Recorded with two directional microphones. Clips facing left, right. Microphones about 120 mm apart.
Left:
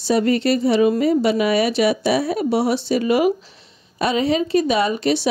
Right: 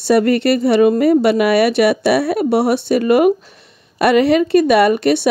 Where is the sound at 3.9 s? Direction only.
65° right (ahead or behind).